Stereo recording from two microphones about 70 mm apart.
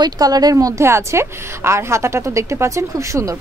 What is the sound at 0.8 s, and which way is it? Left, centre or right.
A woman's voice, right.